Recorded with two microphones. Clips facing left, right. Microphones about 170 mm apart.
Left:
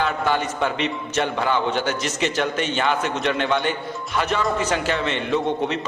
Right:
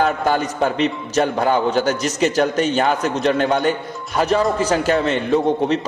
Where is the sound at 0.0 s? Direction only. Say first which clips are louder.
Right 4 dB; 40° right (ahead or behind).